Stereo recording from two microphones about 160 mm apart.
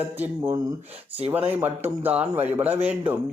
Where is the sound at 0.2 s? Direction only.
15° right (ahead or behind).